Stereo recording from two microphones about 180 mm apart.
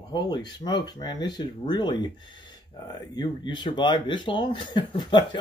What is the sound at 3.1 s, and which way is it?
Speech, 25° left (ahead or behind).